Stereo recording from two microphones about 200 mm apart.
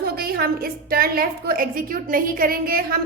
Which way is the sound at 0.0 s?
50° right (ahead or behind).